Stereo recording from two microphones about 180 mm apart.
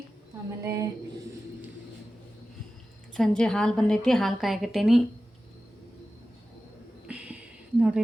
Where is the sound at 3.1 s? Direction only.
5° left (ahead or behind).